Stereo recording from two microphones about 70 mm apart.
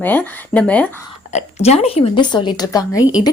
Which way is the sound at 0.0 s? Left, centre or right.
Left.